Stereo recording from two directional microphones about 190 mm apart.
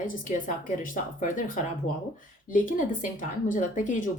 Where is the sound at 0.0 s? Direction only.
45° left (ahead or behind).